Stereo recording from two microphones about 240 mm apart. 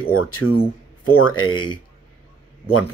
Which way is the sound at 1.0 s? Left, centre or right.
Left.